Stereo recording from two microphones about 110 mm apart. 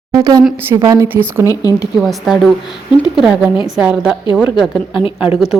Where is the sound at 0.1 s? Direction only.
35° right (ahead or behind).